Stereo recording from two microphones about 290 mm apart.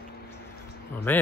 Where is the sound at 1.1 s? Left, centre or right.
Centre.